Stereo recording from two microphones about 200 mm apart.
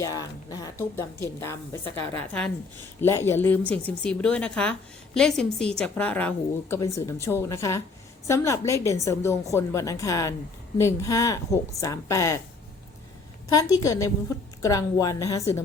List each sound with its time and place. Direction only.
0.0 s a woman's voice: 15° left (ahead or behind)
13.5 s a woman's voice: 20° left (ahead or behind)